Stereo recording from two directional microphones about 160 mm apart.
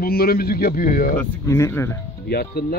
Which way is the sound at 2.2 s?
75° left (ahead or behind).